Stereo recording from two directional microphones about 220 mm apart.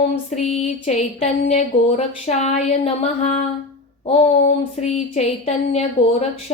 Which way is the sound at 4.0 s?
25° left (ahead or behind).